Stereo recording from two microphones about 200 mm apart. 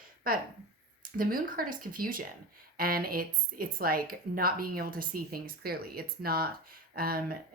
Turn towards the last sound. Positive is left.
turn(degrees=-50)  # may be behind; listen again after turning